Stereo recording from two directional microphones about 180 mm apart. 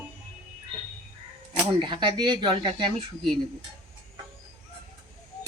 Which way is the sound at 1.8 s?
25° right (ahead or behind).